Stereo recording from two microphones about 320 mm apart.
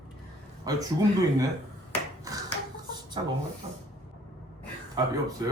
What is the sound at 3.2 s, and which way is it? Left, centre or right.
Speech, centre.